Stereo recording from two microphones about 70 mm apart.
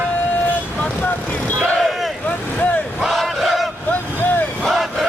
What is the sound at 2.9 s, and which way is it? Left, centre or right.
Battle cry, centre.